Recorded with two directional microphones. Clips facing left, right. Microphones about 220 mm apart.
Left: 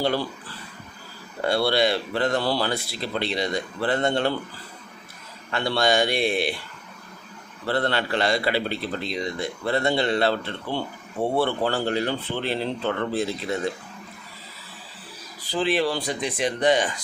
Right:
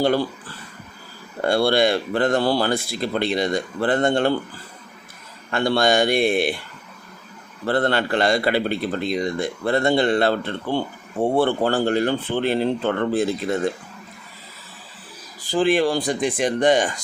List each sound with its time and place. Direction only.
1.5 s a man's voice: 50° right (ahead or behind)
5.5 s a man's voice: 50° right (ahead or behind)
7.7 s a man's voice: 50° right (ahead or behind)
15.5 s a man's voice: 50° right (ahead or behind)